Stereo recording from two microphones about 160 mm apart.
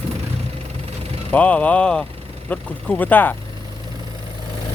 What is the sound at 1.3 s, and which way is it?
Speech, 10° left (ahead or behind).